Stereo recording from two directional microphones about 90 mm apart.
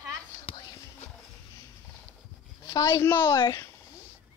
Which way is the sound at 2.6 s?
40° left (ahead or behind).